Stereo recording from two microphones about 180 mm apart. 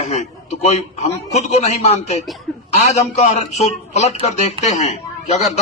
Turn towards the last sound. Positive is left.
turn(degrees=40)  # may be behind; listen again after turning